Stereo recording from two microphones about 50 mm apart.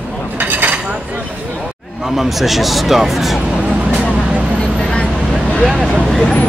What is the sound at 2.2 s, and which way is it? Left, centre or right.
Speech, centre.